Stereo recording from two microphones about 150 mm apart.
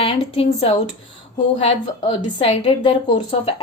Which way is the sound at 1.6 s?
35° left (ahead or behind).